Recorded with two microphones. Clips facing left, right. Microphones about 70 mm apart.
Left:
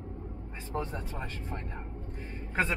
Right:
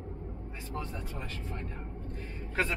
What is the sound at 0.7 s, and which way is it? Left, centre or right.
Speech, left.